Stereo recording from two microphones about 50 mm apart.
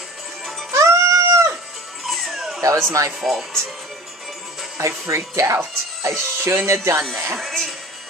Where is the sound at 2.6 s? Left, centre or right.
Right.